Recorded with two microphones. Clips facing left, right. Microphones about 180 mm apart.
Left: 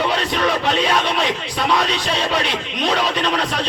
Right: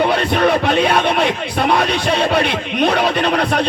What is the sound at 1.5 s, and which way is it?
Music, 60° right (ahead or behind).